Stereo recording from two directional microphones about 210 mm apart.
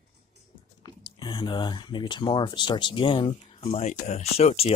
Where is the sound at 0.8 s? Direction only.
20° left (ahead or behind).